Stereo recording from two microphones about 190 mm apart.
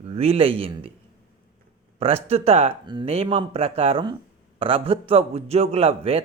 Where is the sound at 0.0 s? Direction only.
30° right (ahead or behind).